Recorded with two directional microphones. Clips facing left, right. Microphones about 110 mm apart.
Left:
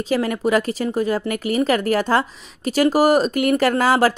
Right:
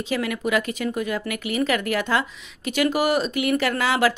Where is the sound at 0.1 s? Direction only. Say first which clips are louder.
Left 5 dB; 35° left (ahead or behind).